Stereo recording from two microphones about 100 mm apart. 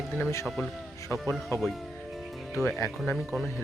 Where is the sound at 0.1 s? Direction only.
25° left (ahead or behind).